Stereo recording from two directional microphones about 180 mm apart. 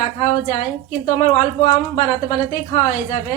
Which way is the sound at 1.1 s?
35° left (ahead or behind).